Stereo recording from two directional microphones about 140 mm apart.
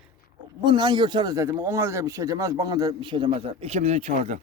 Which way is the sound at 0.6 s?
30° right (ahead or behind).